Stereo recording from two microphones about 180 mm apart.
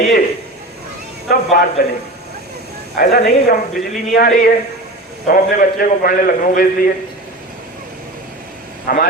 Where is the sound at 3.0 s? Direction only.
50° left (ahead or behind).